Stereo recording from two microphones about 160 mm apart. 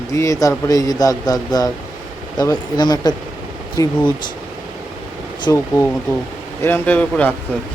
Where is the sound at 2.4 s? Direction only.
25° left (ahead or behind).